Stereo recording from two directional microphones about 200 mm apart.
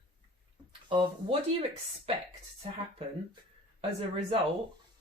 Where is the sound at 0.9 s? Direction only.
30° right (ahead or behind).